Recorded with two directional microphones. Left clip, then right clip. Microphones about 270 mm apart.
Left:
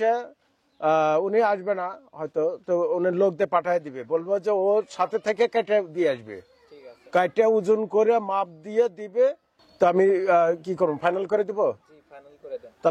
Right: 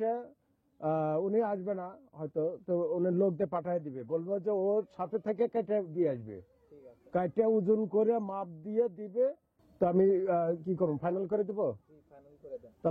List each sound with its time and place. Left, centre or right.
0.0 s a man's voice: centre